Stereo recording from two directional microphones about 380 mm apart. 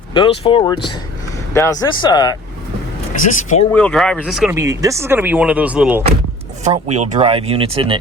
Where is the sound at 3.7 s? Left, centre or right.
Centre.